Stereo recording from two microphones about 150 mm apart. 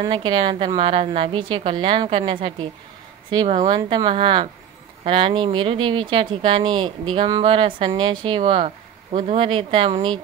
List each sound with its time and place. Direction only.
0.0 s speech: 30° right (ahead or behind)